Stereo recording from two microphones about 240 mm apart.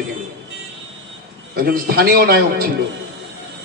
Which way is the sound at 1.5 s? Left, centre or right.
Right.